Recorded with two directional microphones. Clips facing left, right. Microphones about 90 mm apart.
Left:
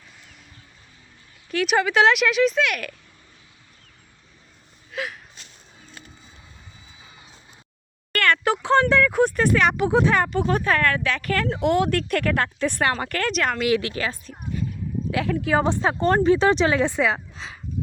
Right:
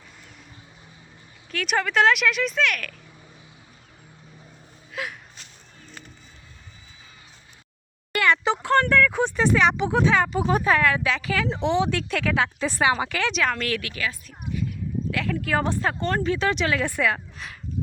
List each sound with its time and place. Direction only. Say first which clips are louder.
1.5 s speech: left 4 dB; centre (ahead or behind)
4.9 s gasp: left 2 dB; centre (ahead or behind)
8.1 s a sound: even; 5° right (ahead or behind)
8.6 s a sound: left 1 dB; 15° left (ahead or behind)
9.9 s speech: left 1 dB; 10° left (ahead or behind)
10.3 s speech: even; 10° right (ahead or behind)
13.7 s speech: left 7 dB; 20° left (ahead or behind)
13.9 s speech: left 2 dB; 35° left (ahead or behind)
15.3 s speech: left 4 dB; 15° left (ahead or behind)
16.0 s speech: left 6 dB; 35° left (ahead or behind)